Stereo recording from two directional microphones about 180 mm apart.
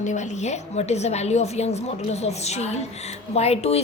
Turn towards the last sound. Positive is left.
turn(degrees=35)  # may be behind; listen again after turning